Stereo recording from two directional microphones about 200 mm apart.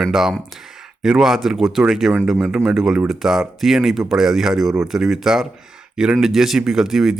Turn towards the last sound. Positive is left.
turn(degrees=0)  # may be behind; listen again after turning